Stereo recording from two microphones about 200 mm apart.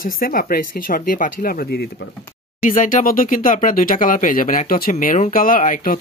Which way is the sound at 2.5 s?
40° left (ahead or behind).